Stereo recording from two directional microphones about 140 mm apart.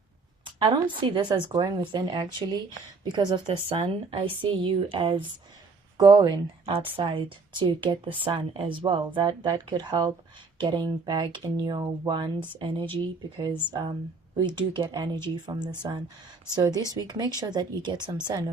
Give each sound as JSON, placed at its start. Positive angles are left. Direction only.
{"t": 0.9, "sound": "a woman's voice", "side_deg": -35}